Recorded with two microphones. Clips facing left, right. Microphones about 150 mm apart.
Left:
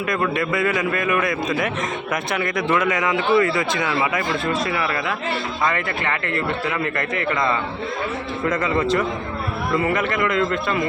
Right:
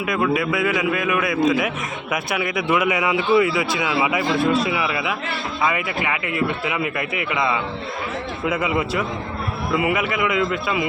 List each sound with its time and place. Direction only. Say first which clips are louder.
0.1 s a man's voice: right 2 dB; 5° right (ahead or behind)